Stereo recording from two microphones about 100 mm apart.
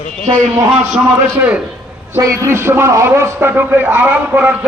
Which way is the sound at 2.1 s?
30° right (ahead or behind).